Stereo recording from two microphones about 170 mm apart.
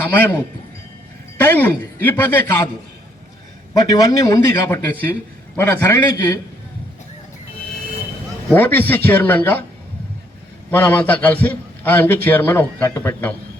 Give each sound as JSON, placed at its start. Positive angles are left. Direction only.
{"t": 0.0, "sound": "a man's voice", "side_deg": 10}
{"t": 3.8, "sound": "a man's voice", "side_deg": 20}
{"t": 8.4, "sound": "a man's voice", "side_deg": 10}
{"t": 10.7, "sound": "a man's voice", "side_deg": 10}